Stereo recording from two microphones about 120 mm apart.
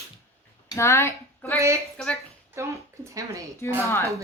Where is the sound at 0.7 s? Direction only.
25° left (ahead or behind).